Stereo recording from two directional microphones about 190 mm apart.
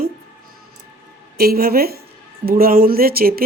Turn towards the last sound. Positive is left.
turn(degrees=-50)  # may be behind; listen again after turning